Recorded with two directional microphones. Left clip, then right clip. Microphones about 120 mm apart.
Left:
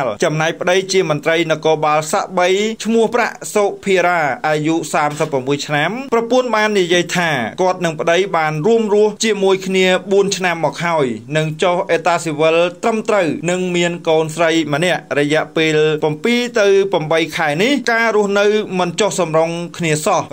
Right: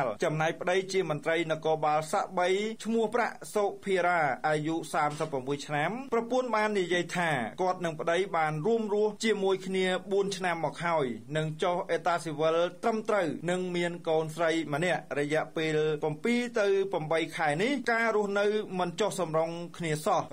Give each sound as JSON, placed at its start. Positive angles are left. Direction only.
{"t": 0.0, "sound": "a man's voice", "side_deg": 25}